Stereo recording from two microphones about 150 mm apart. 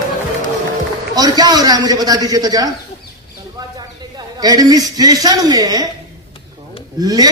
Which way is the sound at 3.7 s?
25° right (ahead or behind).